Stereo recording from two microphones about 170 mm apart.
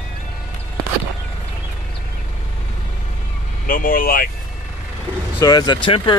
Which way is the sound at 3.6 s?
55° left (ahead or behind).